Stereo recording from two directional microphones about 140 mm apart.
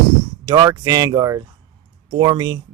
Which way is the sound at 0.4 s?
25° right (ahead or behind).